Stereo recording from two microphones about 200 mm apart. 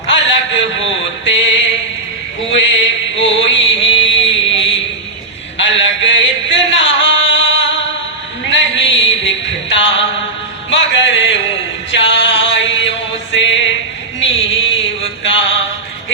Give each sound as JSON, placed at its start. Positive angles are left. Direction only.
{"t": 0.5, "sound": "music", "side_deg": 65}
{"t": 2.5, "sound": "mantra", "side_deg": 65}
{"t": 5.5, "sound": "music", "side_deg": 65}
{"t": 10.7, "sound": "a sound", "side_deg": 65}
{"t": 11.9, "sound": "music", "side_deg": 65}
{"t": 14.2, "sound": "a sound", "side_deg": 70}